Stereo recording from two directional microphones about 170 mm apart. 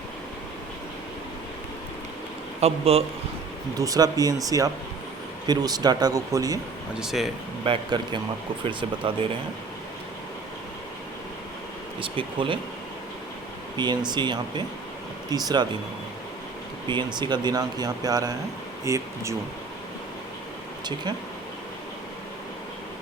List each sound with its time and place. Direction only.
2.6 s speech: 35° right (ahead or behind)
3.8 s speech: 20° right (ahead or behind)
7.0 s speech: centre (ahead or behind)
7.6 s speech: 30° right (ahead or behind)
11.9 s speech: 30° right (ahead or behind)
13.7 s speech: 25° right (ahead or behind)
16.9 s speech: 25° right (ahead or behind)